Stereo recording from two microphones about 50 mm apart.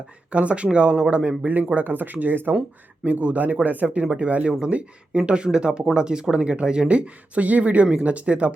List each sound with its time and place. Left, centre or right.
0.3 s speech: right
3.0 s speech: right